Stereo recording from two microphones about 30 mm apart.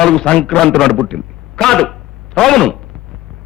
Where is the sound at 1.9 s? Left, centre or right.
Centre.